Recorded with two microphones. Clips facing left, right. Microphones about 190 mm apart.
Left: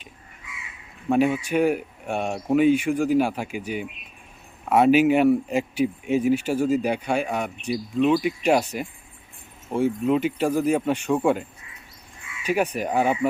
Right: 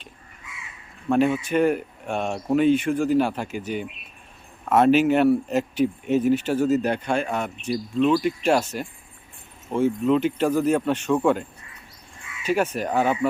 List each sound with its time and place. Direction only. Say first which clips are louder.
1.1 s speech: even; 10° left (ahead or behind)